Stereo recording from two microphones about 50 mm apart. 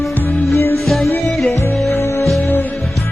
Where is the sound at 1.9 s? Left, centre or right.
Left.